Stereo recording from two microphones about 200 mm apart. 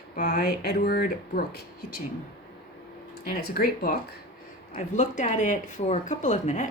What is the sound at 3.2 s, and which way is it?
Speech, 45° left (ahead or behind).